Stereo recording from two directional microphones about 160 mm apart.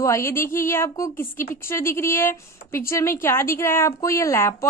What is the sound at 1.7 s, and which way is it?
A woman's voice, 15° left (ahead or behind).